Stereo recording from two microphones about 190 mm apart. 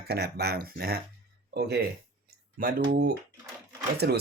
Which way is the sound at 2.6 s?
45° right (ahead or behind).